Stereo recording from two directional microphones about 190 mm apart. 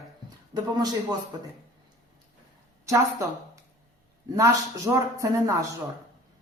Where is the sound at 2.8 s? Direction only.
15° right (ahead or behind).